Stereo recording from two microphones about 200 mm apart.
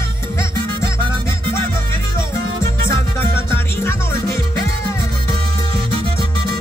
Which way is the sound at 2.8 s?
15° left (ahead or behind).